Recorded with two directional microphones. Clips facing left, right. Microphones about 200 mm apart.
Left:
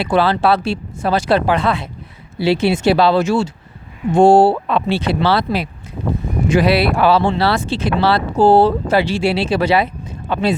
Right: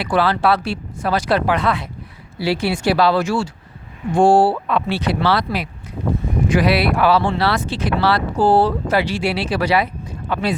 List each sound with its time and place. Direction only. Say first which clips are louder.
0.0 s speech: left 2 dB; 25° left (ahead or behind)